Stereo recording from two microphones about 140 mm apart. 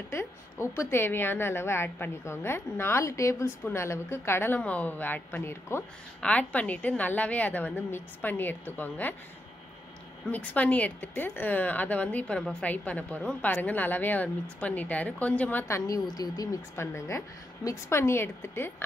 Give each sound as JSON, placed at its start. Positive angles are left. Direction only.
{"t": 0.1, "sound": "a woman's voice", "side_deg": 20}
{"t": 10.3, "sound": "a woman's voice", "side_deg": 10}